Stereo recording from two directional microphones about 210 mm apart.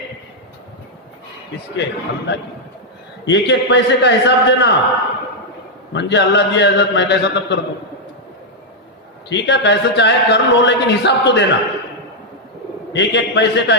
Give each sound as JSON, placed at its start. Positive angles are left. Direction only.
{"t": 1.7, "sound": "speech", "side_deg": 55}
{"t": 5.9, "sound": "speech", "side_deg": 55}
{"t": 9.3, "sound": "speech", "side_deg": 55}
{"t": 12.9, "sound": "speech", "side_deg": 55}